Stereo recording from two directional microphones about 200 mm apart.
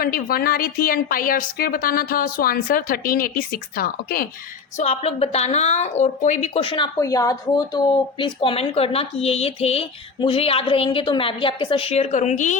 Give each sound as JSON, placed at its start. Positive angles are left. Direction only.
{"t": 0.0, "sound": "a woman's voice", "side_deg": 45}
{"t": 4.8, "sound": "speech", "side_deg": 30}